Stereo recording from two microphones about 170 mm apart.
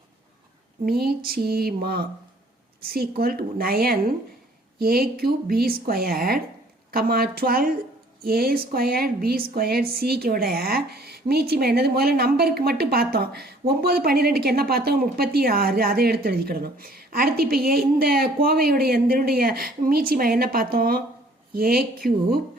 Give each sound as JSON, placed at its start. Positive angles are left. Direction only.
{"t": 0.9, "sound": "speech", "side_deg": -65}